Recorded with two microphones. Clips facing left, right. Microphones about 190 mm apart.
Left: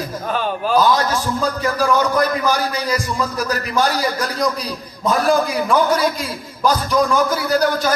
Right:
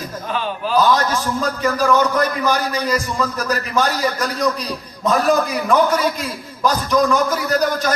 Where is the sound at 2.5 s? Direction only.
10° left (ahead or behind).